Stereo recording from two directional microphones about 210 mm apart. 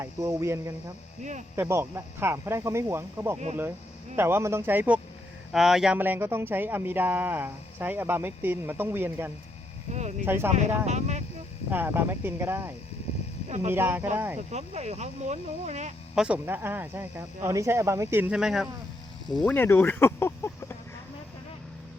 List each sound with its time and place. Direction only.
0.0 s speech: 15° right (ahead or behind)
1.2 s speech: 35° right (ahead or behind)
1.5 s speech: 10° right (ahead or behind)
9.9 s speech: 35° right (ahead or behind)
10.2 s speech: 10° right (ahead or behind)
10.8 s speech: 35° right (ahead or behind)
11.7 s speech: 10° right (ahead or behind)
14.5 s speech: 30° right (ahead or behind)
16.1 s speech: 5° right (ahead or behind); by 20.7 s 10° left (ahead or behind)